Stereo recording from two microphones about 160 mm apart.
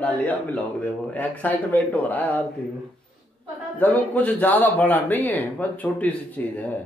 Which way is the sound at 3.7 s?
10° left (ahead or behind).